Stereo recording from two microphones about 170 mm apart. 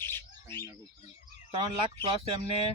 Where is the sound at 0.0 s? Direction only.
15° left (ahead or behind).